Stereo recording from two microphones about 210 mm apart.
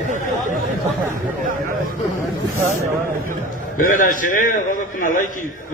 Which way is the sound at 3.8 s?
40° left (ahead or behind).